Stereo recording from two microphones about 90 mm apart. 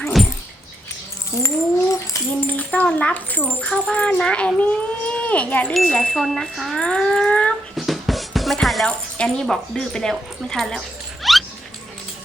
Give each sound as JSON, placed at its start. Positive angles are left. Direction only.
{"t": 0.0, "sound": "dog", "side_deg": 0}
{"t": 1.4, "sound": "a sound", "side_deg": 35}
{"t": 2.4, "sound": "tambourine", "side_deg": 20}
{"t": 2.6, "sound": "speech", "side_deg": 10}
{"t": 5.7, "sound": "speech", "side_deg": 5}
{"t": 7.8, "sound": "music", "side_deg": 0}
{"t": 8.6, "sound": "speech", "side_deg": 0}
{"t": 10.8, "sound": "dog", "side_deg": 0}